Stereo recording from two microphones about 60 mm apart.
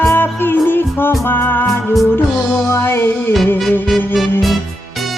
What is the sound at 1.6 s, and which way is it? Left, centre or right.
Music, centre.